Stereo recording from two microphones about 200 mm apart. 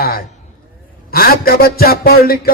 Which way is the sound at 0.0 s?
50° left (ahead or behind).